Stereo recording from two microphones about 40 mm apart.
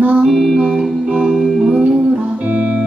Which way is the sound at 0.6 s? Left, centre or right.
Centre.